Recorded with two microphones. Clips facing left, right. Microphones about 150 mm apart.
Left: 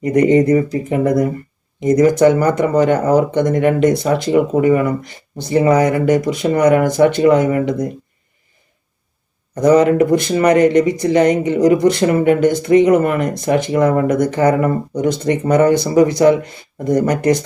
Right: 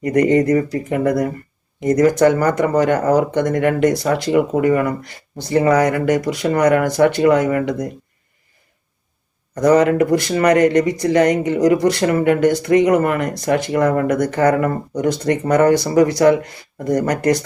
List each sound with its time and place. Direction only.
0.0 s speech: 20° left (ahead or behind)
9.6 s speech: 20° left (ahead or behind)